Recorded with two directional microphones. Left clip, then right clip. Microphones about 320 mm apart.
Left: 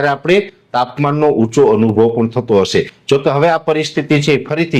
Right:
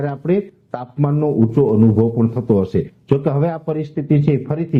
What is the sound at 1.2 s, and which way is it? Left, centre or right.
Speech, left.